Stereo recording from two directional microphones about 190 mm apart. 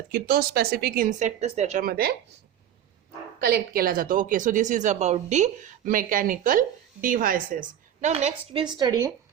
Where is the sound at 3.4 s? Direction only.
55° right (ahead or behind); by 8.6 s 35° right (ahead or behind).